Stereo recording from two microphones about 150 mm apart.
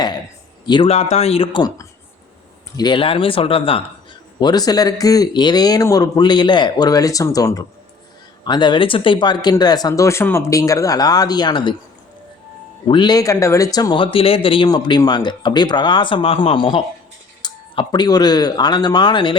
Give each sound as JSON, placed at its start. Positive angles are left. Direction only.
{"t": 0.6, "sound": "a man's voice", "side_deg": 30}
{"t": 0.9, "sound": "speech", "side_deg": 50}
{"t": 2.7, "sound": "speech", "side_deg": 30}
{"t": 4.4, "sound": "speech", "side_deg": 25}
{"t": 12.9, "sound": "speech", "side_deg": 30}